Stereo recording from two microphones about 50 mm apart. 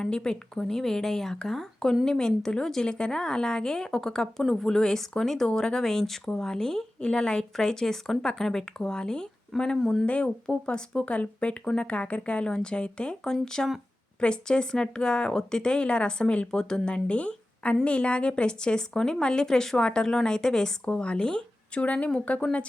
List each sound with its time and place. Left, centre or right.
0.0 s speech: centre
9.8 s speech: centre
10.1 s speech: left